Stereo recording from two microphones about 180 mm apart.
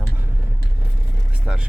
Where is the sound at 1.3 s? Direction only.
5° right (ahead or behind).